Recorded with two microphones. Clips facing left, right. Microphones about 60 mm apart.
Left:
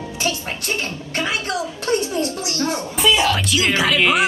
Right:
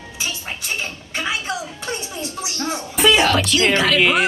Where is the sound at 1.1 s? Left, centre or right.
Centre.